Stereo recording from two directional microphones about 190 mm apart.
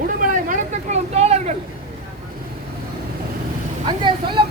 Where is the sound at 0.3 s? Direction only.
45° right (ahead or behind).